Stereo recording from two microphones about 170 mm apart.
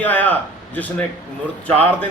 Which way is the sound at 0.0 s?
10° left (ahead or behind).